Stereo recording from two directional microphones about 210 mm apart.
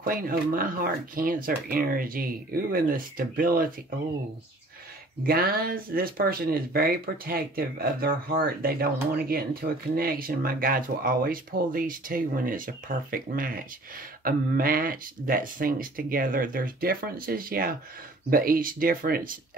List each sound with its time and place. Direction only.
0.0 s speech: 40° right (ahead or behind)
5.2 s speech: 45° right (ahead or behind)